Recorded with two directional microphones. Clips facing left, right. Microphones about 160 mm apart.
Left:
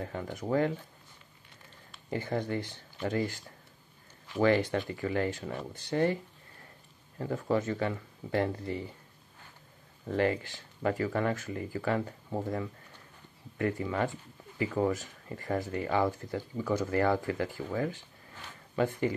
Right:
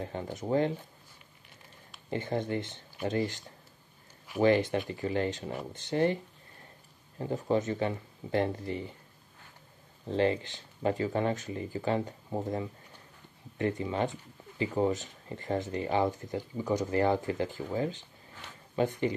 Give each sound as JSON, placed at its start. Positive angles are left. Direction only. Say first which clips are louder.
{"t": 0.0, "sound": "speech", "louder": "even", "side_deg": -25}
{"t": 2.0, "sound": "speech", "louder": "right 1 dB", "side_deg": -20}
{"t": 7.2, "sound": "speech", "louder": "right 1 dB", "side_deg": -20}
{"t": 10.0, "sound": "speech", "louder": "right 1 dB", "side_deg": -25}
{"t": 13.6, "sound": "speech", "louder": "even", "side_deg": -25}